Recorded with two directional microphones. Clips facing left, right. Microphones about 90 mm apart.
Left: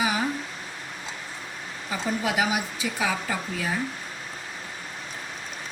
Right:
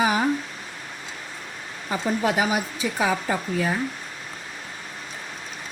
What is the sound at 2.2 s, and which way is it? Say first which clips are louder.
Speech: right 2 dB; 40° right (ahead or behind).